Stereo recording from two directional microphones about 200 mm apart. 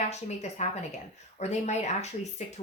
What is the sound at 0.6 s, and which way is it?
Speech, 35° left (ahead or behind).